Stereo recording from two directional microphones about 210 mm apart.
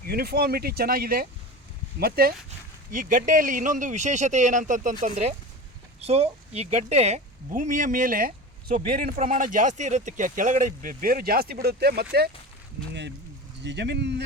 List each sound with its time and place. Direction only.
0.0 s speech: 45° right (ahead or behind)